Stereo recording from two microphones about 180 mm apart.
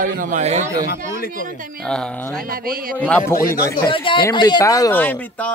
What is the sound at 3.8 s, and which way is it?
Speech, 25° left (ahead or behind).